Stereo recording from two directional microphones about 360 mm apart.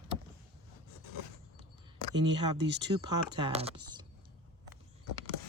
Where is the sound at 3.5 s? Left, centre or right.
Centre.